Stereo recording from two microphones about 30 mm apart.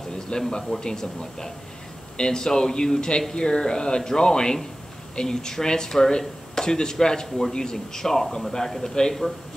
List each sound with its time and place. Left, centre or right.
0.3 s a man's voice: left; by 8.9 s centre